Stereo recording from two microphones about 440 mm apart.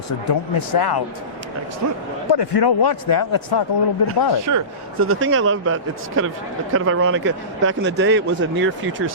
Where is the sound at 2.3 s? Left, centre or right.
Left.